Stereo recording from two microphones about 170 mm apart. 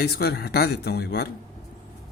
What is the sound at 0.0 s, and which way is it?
Speech, 70° left (ahead or behind).